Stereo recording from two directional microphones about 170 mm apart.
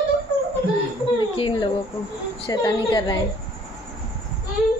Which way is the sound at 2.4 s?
25° left (ahead or behind).